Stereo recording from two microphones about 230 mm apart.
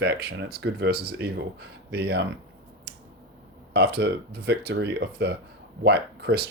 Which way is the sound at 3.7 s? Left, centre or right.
Right.